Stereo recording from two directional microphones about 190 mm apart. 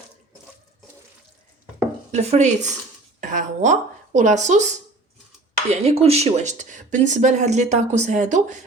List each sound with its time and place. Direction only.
2.1 s speech: 35° right (ahead or behind)
5.7 s speech: 35° right (ahead or behind)